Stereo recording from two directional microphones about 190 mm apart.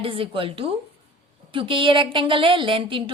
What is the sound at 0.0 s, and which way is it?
Speech, 30° right (ahead or behind).